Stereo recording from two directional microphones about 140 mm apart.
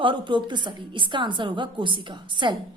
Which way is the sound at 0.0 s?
35° right (ahead or behind).